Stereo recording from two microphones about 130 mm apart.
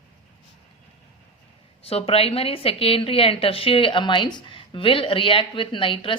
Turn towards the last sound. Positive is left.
turn(degrees=40)  # may be behind; listen again after turning